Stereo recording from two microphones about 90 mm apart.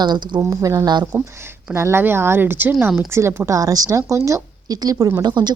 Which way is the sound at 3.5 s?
40° right (ahead or behind).